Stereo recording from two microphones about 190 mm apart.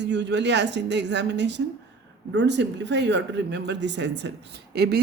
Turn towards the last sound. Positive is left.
turn(degrees=-60)  # may be behind; listen again after turning